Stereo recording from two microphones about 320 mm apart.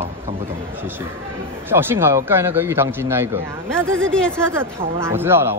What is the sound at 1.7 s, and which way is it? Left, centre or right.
Speech, centre.